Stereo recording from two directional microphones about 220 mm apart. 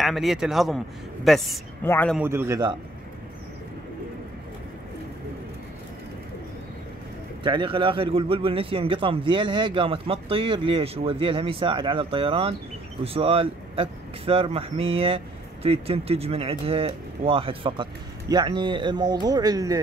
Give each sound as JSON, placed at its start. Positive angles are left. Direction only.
{"t": 0.0, "sound": "a man's voice", "side_deg": 0}
{"t": 2.1, "sound": "a man's voice", "side_deg": -10}
{"t": 7.4, "sound": "speech", "side_deg": -20}